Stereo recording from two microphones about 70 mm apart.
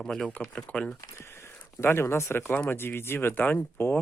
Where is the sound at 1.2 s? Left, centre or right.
Left.